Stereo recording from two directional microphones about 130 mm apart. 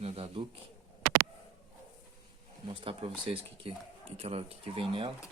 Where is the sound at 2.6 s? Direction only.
45° right (ahead or behind).